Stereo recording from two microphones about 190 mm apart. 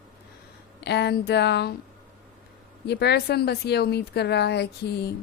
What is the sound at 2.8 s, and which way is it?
A woman's voice, 60° left (ahead or behind).